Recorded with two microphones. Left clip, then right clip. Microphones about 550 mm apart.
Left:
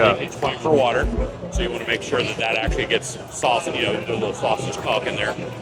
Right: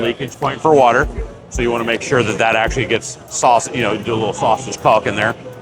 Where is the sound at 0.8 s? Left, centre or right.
Right.